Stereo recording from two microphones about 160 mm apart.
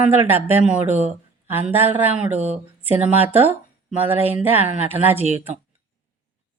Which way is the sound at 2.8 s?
10° right (ahead or behind).